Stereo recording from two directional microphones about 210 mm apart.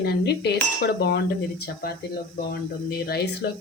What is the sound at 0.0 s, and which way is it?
Cutlery, 50° left (ahead or behind).